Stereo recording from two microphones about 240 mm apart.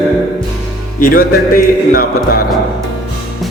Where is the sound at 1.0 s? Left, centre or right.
Left.